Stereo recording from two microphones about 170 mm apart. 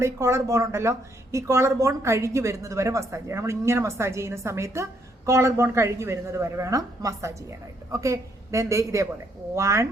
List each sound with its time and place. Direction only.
0.0 s speech: 15° right (ahead or behind)